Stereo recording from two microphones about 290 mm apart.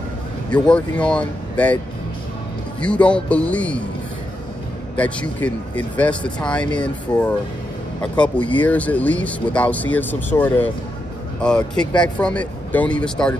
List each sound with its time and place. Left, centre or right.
0.5 s speech: centre
2.8 s speech: centre
4.9 s speech: centre